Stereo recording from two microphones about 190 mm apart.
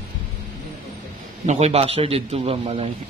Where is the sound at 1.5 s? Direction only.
35° right (ahead or behind).